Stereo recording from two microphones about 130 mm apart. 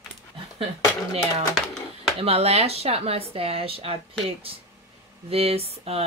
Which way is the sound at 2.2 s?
55° right (ahead or behind).